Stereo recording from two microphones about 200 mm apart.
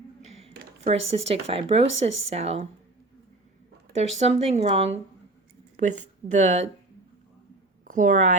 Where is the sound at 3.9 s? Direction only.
30° right (ahead or behind).